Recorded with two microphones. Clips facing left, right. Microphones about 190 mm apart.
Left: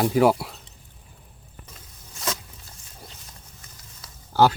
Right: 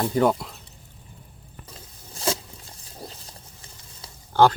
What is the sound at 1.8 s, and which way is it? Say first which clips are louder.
Zipper: right 5 dB; 30° right (ahead or behind).